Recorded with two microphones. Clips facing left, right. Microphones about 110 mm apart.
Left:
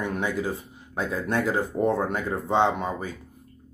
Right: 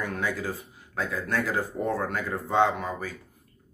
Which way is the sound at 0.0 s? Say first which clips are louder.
Left 3 dB; 20° left (ahead or behind).